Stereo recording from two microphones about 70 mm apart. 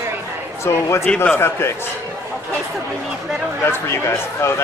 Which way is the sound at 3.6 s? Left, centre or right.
Left.